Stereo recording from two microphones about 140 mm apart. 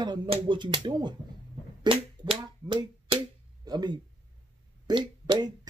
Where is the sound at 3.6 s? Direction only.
30° right (ahead or behind).